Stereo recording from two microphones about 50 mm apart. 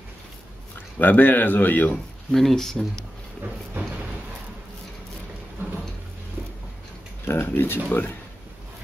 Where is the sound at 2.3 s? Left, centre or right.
Centre.